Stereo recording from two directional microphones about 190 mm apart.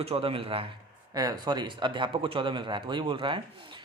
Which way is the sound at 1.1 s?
20° right (ahead or behind).